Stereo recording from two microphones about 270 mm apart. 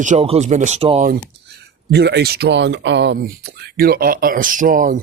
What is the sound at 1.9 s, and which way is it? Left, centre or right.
Speech, right.